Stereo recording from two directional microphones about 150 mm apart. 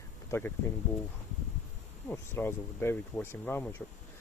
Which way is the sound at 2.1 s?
15° left (ahead or behind).